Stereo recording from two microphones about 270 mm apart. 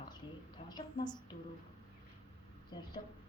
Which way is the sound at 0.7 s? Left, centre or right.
Centre.